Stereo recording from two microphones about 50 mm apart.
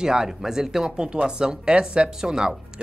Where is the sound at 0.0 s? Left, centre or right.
Centre.